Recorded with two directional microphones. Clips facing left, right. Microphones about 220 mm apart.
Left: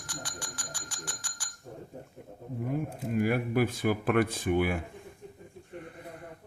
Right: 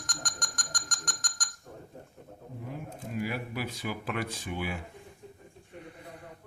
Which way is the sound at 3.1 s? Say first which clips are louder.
Left 6 dB; 50° left (ahead or behind).